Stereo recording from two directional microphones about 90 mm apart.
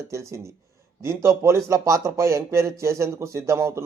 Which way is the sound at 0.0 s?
35° right (ahead or behind).